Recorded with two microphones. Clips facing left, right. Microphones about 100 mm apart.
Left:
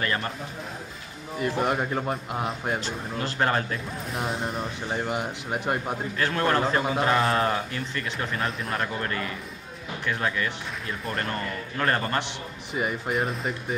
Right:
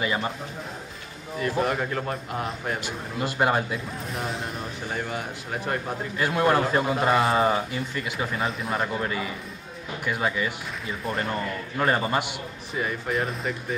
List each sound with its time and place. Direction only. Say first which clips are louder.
0.0 s speech: right 2 dB; 10° right (ahead or behind)
1.6 s speech: even; 20° left (ahead or behind)
2.8 s speech: right 1 dB; 10° right (ahead or behind)
4.8 s speech: left 2 dB; 20° left (ahead or behind)
6.1 s a man's voice: right 3 dB; 10° right (ahead or behind)
12.7 s speech: even; 20° left (ahead or behind)
13.2 s a man's voice: even; centre (ahead or behind)